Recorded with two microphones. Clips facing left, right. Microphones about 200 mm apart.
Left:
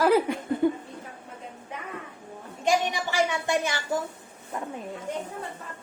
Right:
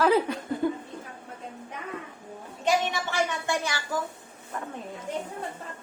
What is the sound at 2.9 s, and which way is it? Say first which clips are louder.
Speech: left 2 dB; 15° left (ahead or behind).